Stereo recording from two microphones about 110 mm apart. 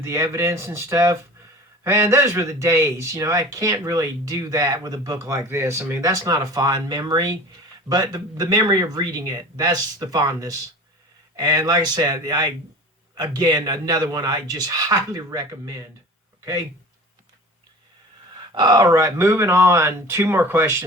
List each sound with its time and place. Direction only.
0.0 s speech: 25° right (ahead or behind)
18.5 s speech: 40° right (ahead or behind); by 20.8 s 25° right (ahead or behind)